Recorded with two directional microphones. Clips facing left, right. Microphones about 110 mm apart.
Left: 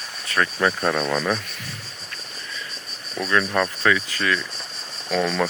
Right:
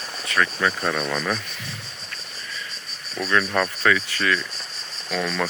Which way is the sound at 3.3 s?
10° left (ahead or behind).